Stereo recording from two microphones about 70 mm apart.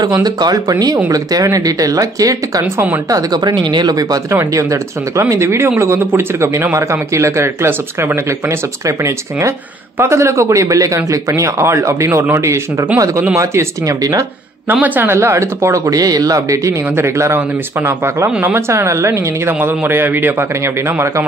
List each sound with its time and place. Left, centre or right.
0.2 s speech: right
0.7 s speech: right
2.6 s speech: right
3.1 s speech: right
4.3 s speech: right
14.7 s speech: right
15.1 s speech: right
16.9 s speech: right